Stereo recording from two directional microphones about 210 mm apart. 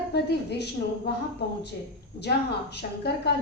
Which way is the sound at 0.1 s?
50° left (ahead or behind).